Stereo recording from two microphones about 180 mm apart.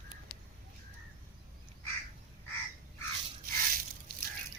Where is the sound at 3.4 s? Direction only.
55° right (ahead or behind).